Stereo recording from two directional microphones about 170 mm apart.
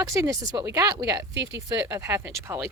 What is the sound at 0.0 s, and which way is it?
Speech, 20° right (ahead or behind).